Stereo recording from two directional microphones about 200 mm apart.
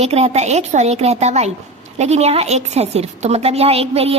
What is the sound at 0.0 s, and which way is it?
A woman's voice, 30° right (ahead or behind).